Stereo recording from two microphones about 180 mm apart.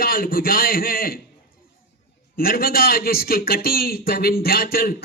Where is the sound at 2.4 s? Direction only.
55° left (ahead or behind).